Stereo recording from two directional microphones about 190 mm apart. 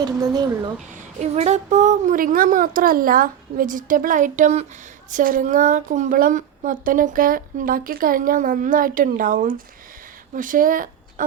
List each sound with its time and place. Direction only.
0.0 s speech: 20° right (ahead or behind)
1.2 s a woman's voice: 35° right (ahead or behind)